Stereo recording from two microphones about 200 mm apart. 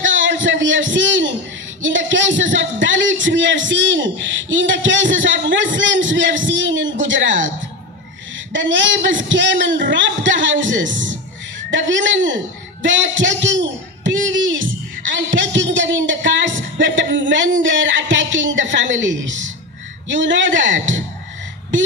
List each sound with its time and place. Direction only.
0.0 s a sound: 70° right (ahead or behind)
1.8 s a man's voice: 70° right (ahead or behind)
8.5 s a man's voice: 65° right (ahead or behind)